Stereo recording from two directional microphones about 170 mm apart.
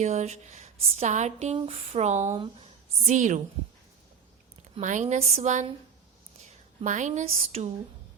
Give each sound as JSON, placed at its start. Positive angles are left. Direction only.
{"t": 0.0, "sound": "speech", "side_deg": -40}
{"t": 2.3, "sound": "speech", "side_deg": -30}
{"t": 4.8, "sound": "speech", "side_deg": -45}
{"t": 6.8, "sound": "speech", "side_deg": -45}